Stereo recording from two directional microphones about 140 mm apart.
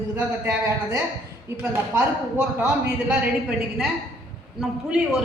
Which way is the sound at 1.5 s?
15° right (ahead or behind).